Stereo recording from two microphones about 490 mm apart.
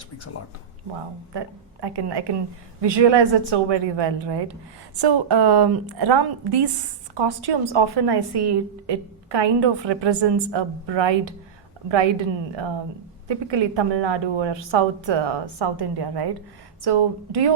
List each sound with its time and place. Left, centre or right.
1.3 s a woman's voice: right
13.2 s a woman's voice: right